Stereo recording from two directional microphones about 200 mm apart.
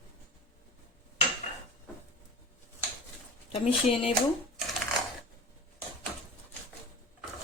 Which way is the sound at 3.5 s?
30° left (ahead or behind).